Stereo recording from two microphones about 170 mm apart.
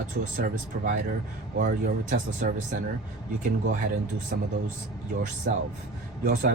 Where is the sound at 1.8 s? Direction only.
45° right (ahead or behind).